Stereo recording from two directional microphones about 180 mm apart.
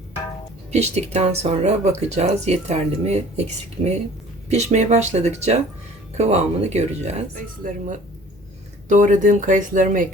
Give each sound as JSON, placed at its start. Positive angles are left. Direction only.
{"t": 0.7, "sound": "speech", "side_deg": -40}